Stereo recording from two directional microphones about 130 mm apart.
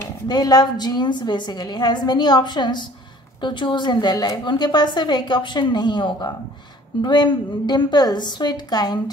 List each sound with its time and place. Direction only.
0.3 s a woman's voice: 30° left (ahead or behind)